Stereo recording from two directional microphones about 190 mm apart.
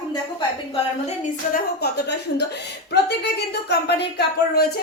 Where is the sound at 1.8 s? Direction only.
65° left (ahead or behind).